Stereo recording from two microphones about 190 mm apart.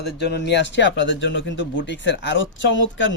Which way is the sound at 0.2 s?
65° left (ahead or behind).